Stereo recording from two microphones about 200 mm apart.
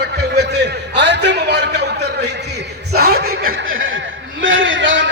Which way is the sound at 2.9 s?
50° right (ahead or behind).